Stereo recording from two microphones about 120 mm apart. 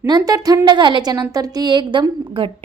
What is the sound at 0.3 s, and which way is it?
A woman's voice, 30° right (ahead or behind).